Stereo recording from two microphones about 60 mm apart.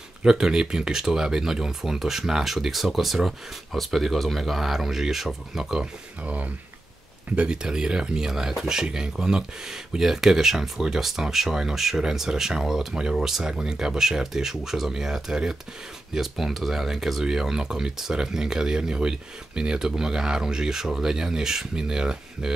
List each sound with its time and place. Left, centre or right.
0.2 s speech: centre
6.2 s speech: right